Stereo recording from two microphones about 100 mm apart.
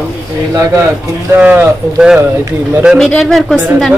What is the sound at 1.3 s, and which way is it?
Speech, 20° right (ahead or behind).